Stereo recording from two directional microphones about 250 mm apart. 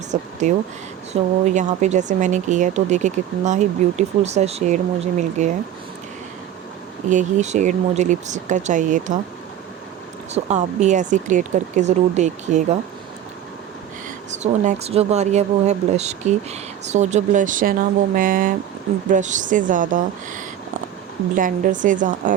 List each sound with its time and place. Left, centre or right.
0.1 s a sound: right
1.1 s speech: right
7.1 s speech: right
10.3 s speech: right
14.3 s speech: right